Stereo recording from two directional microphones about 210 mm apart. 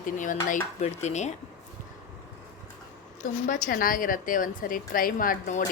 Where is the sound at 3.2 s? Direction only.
40° left (ahead or behind).